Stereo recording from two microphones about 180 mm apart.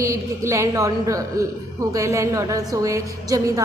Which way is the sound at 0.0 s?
15° right (ahead or behind).